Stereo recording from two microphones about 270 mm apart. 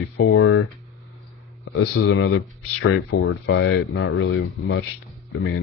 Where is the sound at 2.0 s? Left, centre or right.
Left.